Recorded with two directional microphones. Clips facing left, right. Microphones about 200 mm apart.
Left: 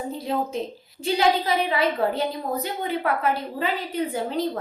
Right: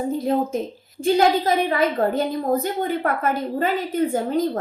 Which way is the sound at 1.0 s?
45° right (ahead or behind).